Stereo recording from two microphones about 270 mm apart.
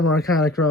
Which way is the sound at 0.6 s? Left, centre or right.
Left.